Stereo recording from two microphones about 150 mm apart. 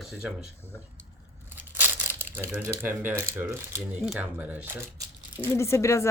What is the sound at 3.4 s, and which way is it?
Speech, 15° right (ahead or behind).